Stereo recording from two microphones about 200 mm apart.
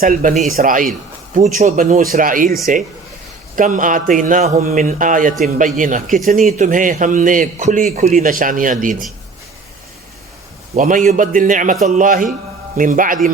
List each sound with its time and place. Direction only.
0.0 s a man's voice: 40° right (ahead or behind)
10.8 s a man's voice: 40° right (ahead or behind)